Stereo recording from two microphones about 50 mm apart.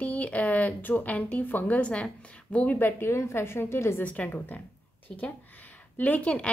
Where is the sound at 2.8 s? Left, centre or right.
Left.